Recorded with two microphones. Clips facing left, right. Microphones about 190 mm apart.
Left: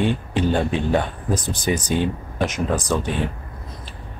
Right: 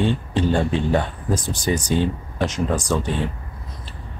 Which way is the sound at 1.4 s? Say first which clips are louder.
Right 1 dB; 20° left (ahead or behind).